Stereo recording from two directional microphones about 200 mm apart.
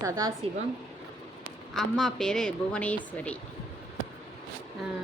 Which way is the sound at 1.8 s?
Centre (ahead or behind).